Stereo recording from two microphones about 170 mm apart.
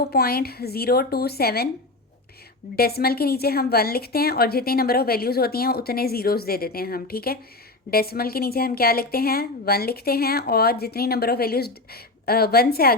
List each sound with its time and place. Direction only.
0.0 s a woman's voice: 65° left (ahead or behind)
2.7 s a woman's voice: 65° left (ahead or behind)